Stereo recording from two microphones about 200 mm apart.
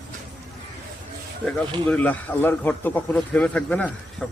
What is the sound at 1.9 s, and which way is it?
A man's voice, 10° left (ahead or behind).